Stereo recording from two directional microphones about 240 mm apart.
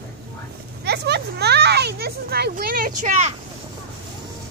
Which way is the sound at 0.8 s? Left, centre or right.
Right.